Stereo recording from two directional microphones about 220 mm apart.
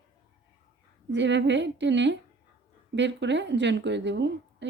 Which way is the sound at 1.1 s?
55° right (ahead or behind).